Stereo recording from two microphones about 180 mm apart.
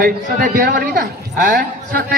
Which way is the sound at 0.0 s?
50° right (ahead or behind).